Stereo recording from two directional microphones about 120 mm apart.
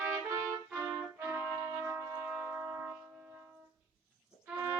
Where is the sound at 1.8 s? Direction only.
15° right (ahead or behind).